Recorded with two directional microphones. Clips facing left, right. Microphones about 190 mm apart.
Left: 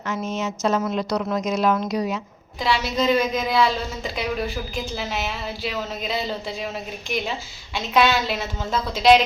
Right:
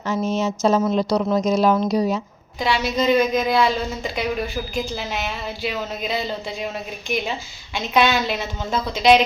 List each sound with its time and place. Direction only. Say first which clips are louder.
0.1 s a woman's voice: right 5 dB; 30° right (ahead or behind)
2.6 s a woman's voice: right 1 dB; centre (ahead or behind)
7.8 s a woman's voice: right 1 dB; centre (ahead or behind)